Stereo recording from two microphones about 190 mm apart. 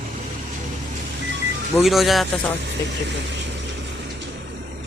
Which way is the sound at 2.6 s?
70° right (ahead or behind).